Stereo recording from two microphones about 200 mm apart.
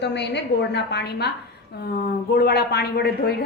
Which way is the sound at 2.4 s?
50° left (ahead or behind).